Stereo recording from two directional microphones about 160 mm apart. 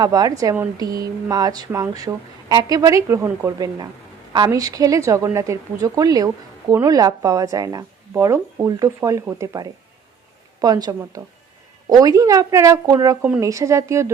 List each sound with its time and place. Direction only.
0.0 s a woman's voice: 25° right (ahead or behind)